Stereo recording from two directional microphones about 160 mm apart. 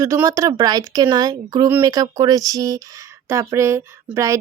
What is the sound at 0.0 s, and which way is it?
Speech, 20° right (ahead or behind).